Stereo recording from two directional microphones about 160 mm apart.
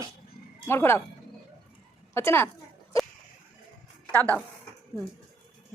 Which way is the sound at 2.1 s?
15° left (ahead or behind).